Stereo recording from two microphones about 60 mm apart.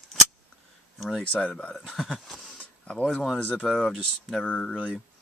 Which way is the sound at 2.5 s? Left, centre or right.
Left.